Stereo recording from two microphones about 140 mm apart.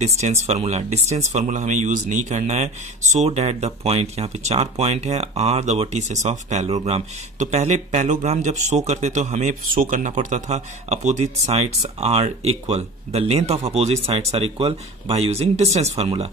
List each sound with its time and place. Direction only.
0.0 s speech: 50° right (ahead or behind)